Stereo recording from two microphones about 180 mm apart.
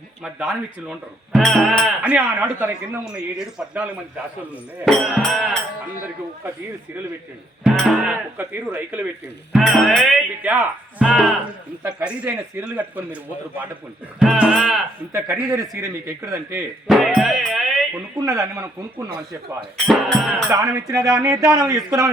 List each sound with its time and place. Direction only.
0.2 s speech: 5° right (ahead or behind)
4.9 s speech: centre (ahead or behind)
7.6 s speech: centre (ahead or behind)
10.4 s a man's voice: 10° right (ahead or behind)
14.2 s speech: 5° right (ahead or behind)
15.1 s a man's voice: 15° right (ahead or behind)
16.9 s music: centre (ahead or behind)
18.3 s a man's voice: 15° right (ahead or behind)
19.9 s speech: centre (ahead or behind)
20.5 s music: 20° right (ahead or behind)